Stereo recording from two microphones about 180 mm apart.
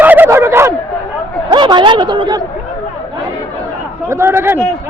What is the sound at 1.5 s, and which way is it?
Speech, 25° right (ahead or behind).